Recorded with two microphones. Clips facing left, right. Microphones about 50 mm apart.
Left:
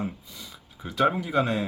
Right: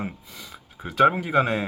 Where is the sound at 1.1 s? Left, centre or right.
Right.